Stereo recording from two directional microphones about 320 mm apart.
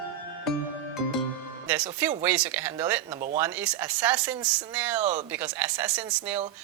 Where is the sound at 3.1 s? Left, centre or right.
Right.